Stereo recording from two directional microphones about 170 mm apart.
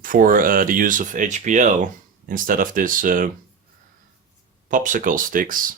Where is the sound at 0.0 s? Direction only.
55° right (ahead or behind).